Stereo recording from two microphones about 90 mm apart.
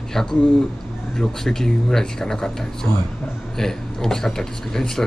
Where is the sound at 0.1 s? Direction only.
5° left (ahead or behind).